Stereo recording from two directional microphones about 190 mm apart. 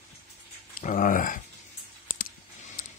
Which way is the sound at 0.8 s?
45° left (ahead or behind).